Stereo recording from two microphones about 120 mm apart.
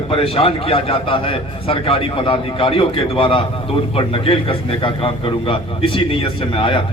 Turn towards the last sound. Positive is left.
turn(degrees=45)  # may be behind; listen again after turning